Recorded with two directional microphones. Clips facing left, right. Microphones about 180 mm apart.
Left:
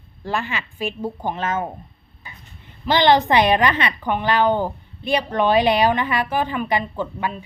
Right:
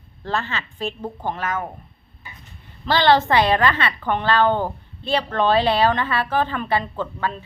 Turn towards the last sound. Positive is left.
turn(degrees=15)  # may be behind; listen again after turning